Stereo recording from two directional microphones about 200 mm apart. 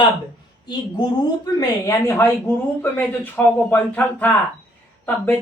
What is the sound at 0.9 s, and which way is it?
A man's voice, 20° left (ahead or behind).